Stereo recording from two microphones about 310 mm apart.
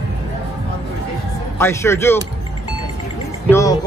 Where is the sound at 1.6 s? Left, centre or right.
Centre.